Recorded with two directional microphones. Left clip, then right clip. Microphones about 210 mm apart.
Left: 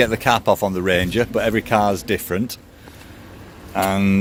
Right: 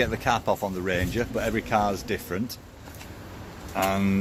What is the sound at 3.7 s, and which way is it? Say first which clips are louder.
Speech: left 6 dB; 45° left (ahead or behind).